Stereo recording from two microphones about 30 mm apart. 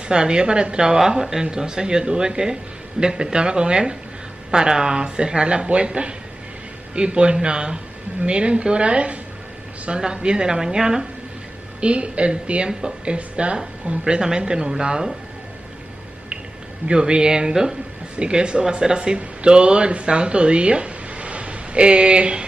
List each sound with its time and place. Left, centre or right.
0.1 s speech: right
0.9 s speech: centre
11.8 s speech: right
14.0 s speech: right
16.8 s speech: right
18.1 s speech: right